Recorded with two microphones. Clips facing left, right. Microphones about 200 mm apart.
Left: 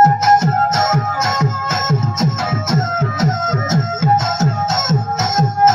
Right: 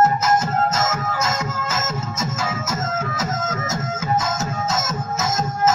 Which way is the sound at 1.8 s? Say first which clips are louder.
Left 8 dB; 85° left.